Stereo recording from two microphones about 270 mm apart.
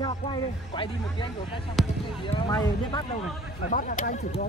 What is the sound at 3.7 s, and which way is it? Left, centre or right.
Speech, left.